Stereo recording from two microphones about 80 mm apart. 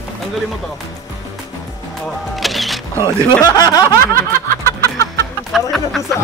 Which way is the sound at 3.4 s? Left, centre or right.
Left.